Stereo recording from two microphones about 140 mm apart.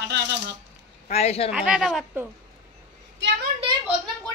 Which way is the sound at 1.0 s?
50° left (ahead or behind).